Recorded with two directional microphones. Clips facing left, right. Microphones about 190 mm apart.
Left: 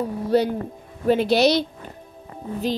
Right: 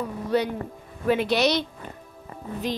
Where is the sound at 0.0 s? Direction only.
35° left (ahead or behind).